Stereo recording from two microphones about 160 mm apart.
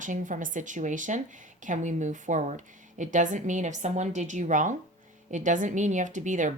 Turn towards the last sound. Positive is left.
turn(degrees=-55)  # may be behind; listen again after turning